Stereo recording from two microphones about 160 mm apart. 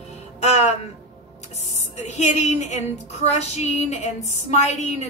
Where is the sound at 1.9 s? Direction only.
45° left (ahead or behind).